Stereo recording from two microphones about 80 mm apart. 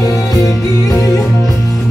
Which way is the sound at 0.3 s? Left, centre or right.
Left.